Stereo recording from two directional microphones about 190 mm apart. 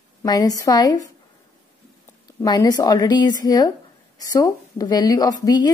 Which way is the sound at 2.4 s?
20° left (ahead or behind).